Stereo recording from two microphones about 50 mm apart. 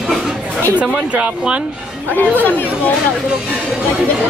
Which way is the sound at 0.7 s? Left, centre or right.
Right.